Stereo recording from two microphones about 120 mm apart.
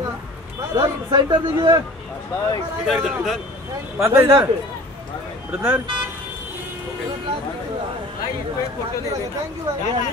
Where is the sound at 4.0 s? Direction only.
25° right (ahead or behind).